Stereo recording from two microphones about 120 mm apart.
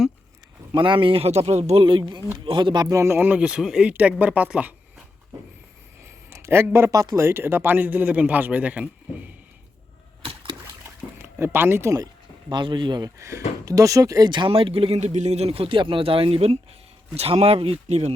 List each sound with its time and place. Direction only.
0.7 s speech: 45° right (ahead or behind); by 1.8 s 65° right (ahead or behind)
1.8 s speech: 45° right (ahead or behind)
2.8 s speech: 25° right (ahead or behind); by 5.0 s 5° right (ahead or behind)
6.1 s speech: 25° right (ahead or behind)
10.8 s a sound: 20° right (ahead or behind)
12.5 s speech: 40° right (ahead or behind)
13.1 s speech: 25° right (ahead or behind); by 18.1 s 65° right (ahead or behind)